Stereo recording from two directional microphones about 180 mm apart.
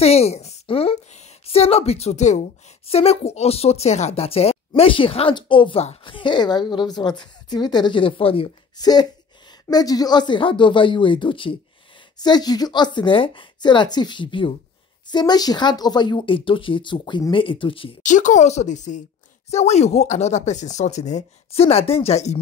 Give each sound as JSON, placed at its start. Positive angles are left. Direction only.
{"t": 0.0, "sound": "a woman's voice", "side_deg": 35}
{"t": 18.0, "sound": "a woman's voice", "side_deg": 45}